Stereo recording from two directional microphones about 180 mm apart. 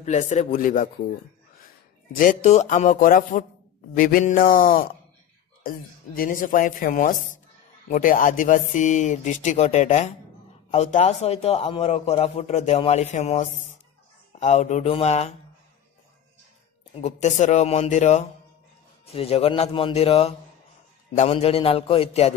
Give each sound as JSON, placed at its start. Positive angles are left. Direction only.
{"t": 0.0, "sound": "speech", "side_deg": 40}
{"t": 2.1, "sound": "a man's voice", "side_deg": 45}
{"t": 16.9, "sound": "a man's voice", "side_deg": 40}